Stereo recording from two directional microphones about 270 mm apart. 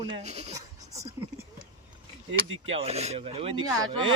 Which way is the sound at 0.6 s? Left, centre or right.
Centre.